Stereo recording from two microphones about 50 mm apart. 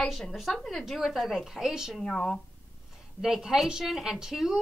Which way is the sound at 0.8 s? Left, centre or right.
Centre.